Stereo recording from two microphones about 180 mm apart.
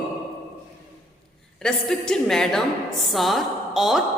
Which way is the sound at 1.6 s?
5° left (ahead or behind).